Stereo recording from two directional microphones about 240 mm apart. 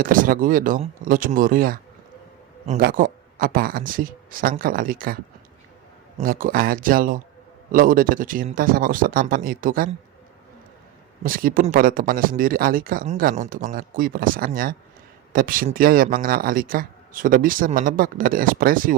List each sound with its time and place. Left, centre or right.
0.0 s speech: right
11.2 s speech: right